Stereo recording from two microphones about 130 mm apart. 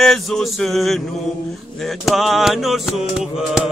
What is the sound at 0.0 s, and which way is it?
Music, centre (ahead or behind).